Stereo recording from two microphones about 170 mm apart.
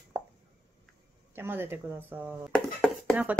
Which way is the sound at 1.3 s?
15° right (ahead or behind).